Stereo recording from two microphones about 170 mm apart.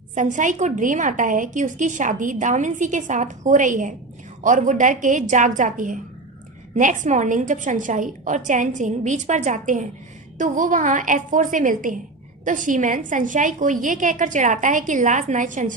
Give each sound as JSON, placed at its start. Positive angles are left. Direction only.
{"t": 0.1, "sound": "a woman's voice", "side_deg": -45}